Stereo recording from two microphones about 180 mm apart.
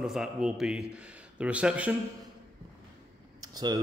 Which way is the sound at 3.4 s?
20° right (ahead or behind).